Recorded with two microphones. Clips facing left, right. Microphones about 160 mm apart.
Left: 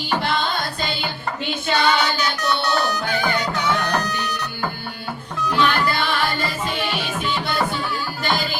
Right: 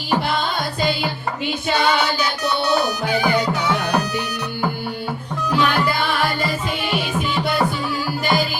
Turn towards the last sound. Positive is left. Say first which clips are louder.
# right 3 dB
turn(degrees=-5)  # may be behind; listen again after turning